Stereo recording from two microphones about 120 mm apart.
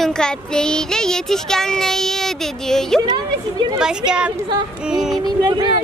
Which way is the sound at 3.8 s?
5° right (ahead or behind).